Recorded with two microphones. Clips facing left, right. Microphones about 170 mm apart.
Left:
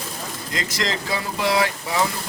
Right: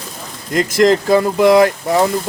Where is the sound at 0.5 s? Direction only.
50° right (ahead or behind).